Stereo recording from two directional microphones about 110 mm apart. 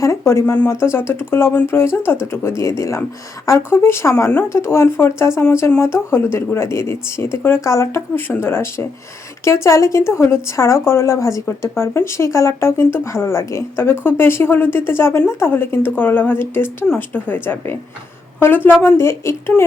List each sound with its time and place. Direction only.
0.0 s speech: 25° left (ahead or behind)